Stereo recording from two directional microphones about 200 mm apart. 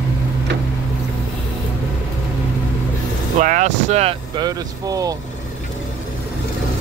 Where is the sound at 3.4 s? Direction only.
40° right (ahead or behind); by 5.2 s 20° right (ahead or behind).